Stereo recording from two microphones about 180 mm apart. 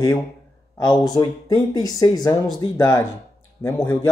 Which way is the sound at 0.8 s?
20° left (ahead or behind).